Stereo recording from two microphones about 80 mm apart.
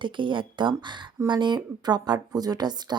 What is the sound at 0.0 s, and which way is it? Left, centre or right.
Speech, right.